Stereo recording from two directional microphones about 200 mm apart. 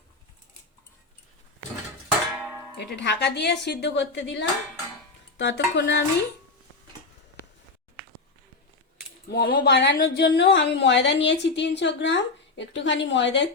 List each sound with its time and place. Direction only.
2.4 s music: 10° right (ahead or behind)
2.7 s a woman's voice: 60° left (ahead or behind)
9.3 s a woman's voice: 45° left (ahead or behind); by 13.5 s 65° left (ahead or behind)